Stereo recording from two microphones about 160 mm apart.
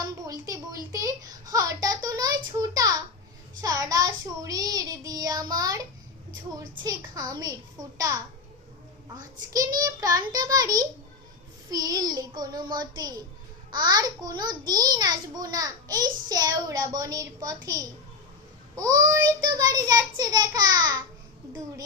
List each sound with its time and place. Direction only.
0.9 s a sound: 20° right (ahead or behind)
3.6 s a child's voice: 20° right (ahead or behind)
9.5 s a child's voice: 25° right (ahead or behind)